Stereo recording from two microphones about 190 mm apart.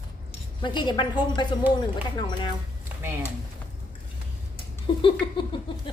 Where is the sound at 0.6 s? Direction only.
25° left (ahead or behind).